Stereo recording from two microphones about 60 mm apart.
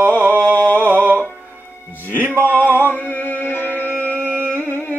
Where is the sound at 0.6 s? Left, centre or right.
Left.